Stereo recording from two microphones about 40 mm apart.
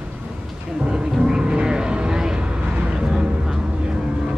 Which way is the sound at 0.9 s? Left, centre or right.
Centre.